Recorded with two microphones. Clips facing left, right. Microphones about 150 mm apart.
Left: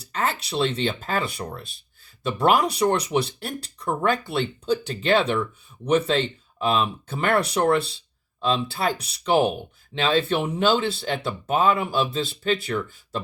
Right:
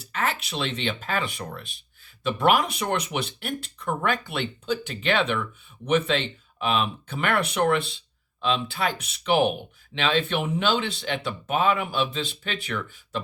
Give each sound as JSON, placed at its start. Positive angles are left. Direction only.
{"t": 0.1, "sound": "speech", "side_deg": 35}